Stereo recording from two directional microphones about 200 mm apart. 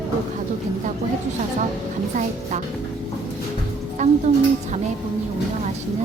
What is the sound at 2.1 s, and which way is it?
Speech, 40° right (ahead or behind).